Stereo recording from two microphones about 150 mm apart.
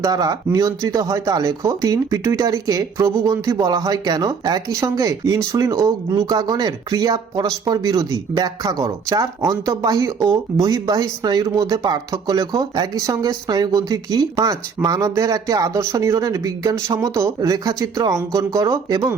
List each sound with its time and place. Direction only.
0.0 s speech: 25° right (ahead or behind)